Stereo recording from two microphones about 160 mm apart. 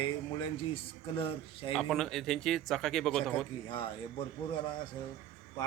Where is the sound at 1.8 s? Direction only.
Centre (ahead or behind).